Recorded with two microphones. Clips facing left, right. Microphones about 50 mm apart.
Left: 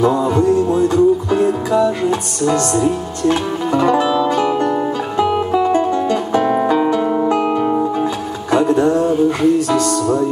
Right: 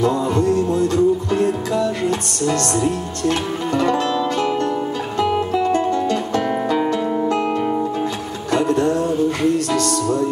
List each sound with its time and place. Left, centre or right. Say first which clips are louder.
0.0 s music: left 4 dB; centre
7.5 s music: left 4 dB; centre